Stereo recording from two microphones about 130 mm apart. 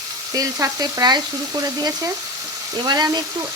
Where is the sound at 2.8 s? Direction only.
30° right (ahead or behind).